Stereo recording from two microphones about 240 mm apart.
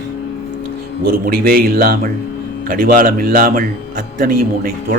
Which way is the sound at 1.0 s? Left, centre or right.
Right.